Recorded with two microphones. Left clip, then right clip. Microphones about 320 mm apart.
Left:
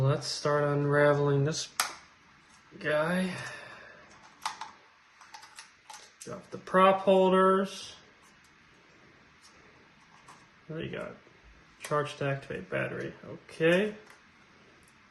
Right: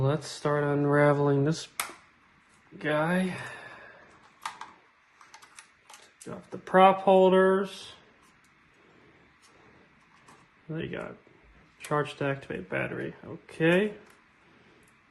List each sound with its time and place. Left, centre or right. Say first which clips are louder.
0.0 s speech: right 1 dB; centre
2.7 s speech: right 1 dB; centre
6.7 s speech: right 3 dB; centre
11.9 s speech: right 2 dB; centre